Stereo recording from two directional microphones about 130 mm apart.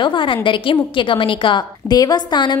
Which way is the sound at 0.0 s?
40° left (ahead or behind).